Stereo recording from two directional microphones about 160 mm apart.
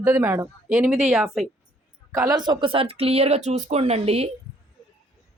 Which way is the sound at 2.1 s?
20° right (ahead or behind).